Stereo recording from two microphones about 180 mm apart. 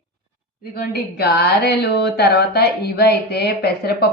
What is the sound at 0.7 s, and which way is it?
A woman's voice, 65° left (ahead or behind).